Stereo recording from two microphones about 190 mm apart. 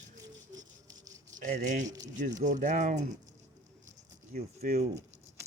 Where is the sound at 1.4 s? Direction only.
45° right (ahead or behind).